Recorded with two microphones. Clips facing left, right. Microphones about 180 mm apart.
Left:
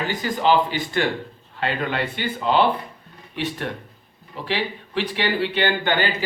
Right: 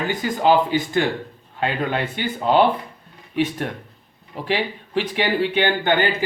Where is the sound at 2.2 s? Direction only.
45° right (ahead or behind).